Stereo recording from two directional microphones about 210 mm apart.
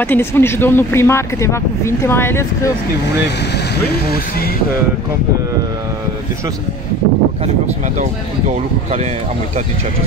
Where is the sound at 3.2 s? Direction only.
50° left (ahead or behind).